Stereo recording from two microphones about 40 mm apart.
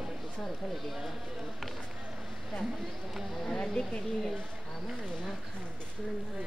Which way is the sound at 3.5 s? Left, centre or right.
Centre.